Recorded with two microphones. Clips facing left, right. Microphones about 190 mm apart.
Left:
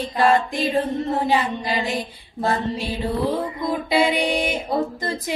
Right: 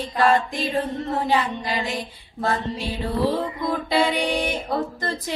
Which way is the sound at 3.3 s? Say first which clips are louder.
Left 1 dB; 10° left (ahead or behind).